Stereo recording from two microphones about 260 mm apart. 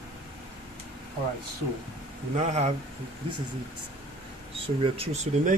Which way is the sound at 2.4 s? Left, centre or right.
Right.